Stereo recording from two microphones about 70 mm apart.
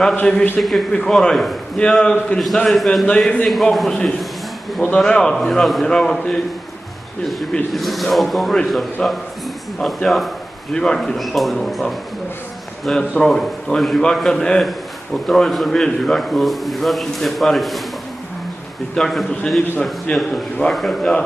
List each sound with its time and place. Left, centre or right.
0.0 s a man's voice: centre
0.6 s a man's voice: centre
3.1 s a man's voice: centre
3.4 s a man's voice: centre
7.7 s a man's voice: centre
9.0 s a man's voice: centre
18.9 s a man's voice: centre